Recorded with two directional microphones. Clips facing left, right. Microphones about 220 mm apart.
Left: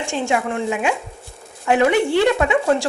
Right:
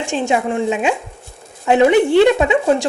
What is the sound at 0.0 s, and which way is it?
A woman's voice, 20° right (ahead or behind).